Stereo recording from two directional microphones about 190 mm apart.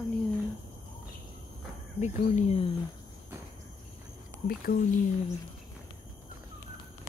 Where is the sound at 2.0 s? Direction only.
35° left (ahead or behind).